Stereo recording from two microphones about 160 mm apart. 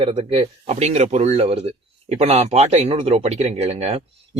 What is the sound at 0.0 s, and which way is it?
Speech, 35° right (ahead or behind).